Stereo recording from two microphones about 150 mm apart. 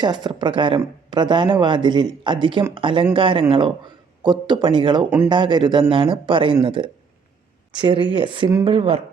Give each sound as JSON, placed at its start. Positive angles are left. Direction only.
{"t": 0.0, "sound": "speech", "side_deg": -30}
{"t": 8.7, "sound": "speech", "side_deg": -40}